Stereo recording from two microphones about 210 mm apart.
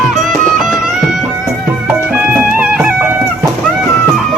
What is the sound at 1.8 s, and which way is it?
Music, 5° right (ahead or behind).